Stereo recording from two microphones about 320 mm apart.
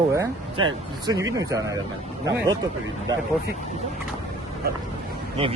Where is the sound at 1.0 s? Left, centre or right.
Centre.